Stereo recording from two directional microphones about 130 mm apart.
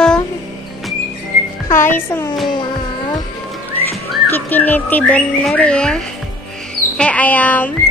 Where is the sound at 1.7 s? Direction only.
20° left (ahead or behind).